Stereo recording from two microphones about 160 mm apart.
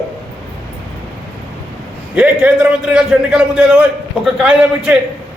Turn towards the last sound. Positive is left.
turn(degrees=-5)  # may be behind; listen again after turning